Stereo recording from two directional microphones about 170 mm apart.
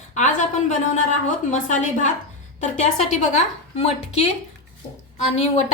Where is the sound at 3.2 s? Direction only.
40° left (ahead or behind).